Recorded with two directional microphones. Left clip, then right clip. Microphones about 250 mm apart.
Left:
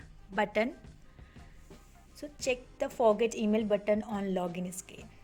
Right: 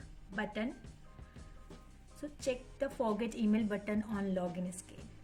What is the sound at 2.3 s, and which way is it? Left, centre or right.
A woman's voice, left.